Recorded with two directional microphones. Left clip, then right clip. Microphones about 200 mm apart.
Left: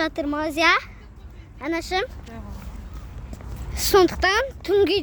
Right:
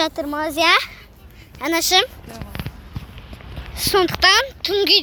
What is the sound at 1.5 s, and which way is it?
Speech, 20° right (ahead or behind).